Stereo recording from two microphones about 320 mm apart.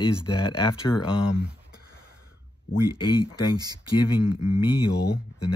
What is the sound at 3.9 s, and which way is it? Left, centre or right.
Speech, left.